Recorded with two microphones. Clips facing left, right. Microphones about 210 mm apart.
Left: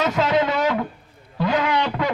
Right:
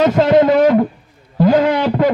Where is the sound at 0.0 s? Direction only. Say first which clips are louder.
Right 9 dB; 50° right (ahead or behind).